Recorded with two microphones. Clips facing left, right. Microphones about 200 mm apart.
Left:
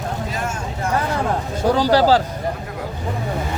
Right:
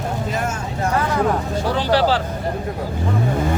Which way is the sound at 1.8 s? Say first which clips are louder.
Left 3 dB; 40° left (ahead or behind).